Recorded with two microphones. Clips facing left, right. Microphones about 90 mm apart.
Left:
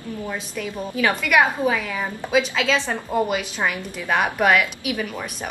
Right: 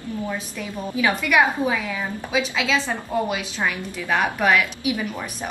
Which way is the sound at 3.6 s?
10° left (ahead or behind).